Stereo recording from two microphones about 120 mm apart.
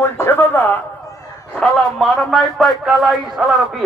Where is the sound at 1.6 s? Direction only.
Centre (ahead or behind).